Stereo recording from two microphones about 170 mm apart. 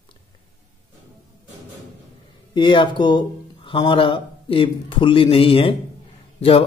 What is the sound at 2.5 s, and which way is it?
Speech, 30° left (ahead or behind).